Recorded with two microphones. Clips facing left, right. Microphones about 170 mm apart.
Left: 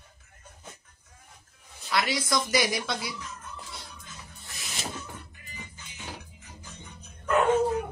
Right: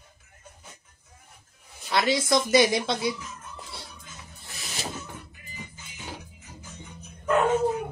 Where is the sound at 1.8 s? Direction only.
25° right (ahead or behind).